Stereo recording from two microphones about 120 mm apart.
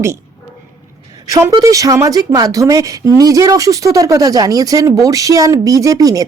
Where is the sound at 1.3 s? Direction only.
25° right (ahead or behind).